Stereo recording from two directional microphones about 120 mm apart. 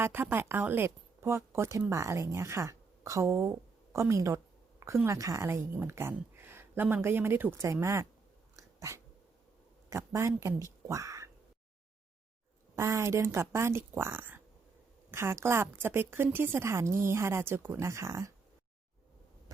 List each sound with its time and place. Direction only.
0.0 s a woman's voice: 20° right (ahead or behind)
12.7 s a woman's voice: 25° right (ahead or behind)